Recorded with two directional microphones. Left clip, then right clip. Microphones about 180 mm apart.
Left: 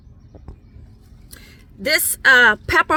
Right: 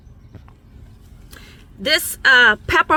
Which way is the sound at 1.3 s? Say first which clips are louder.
Right 2 dB; 15° left (ahead or behind).